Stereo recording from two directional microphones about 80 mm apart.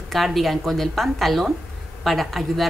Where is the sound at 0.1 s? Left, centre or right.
Centre.